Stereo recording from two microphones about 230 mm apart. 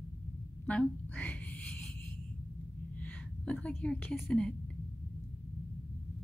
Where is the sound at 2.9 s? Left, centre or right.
Centre.